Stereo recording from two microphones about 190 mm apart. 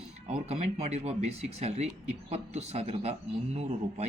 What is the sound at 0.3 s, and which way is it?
A man's voice, 35° right (ahead or behind).